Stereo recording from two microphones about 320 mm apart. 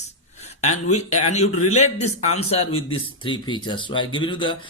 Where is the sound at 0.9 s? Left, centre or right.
Left.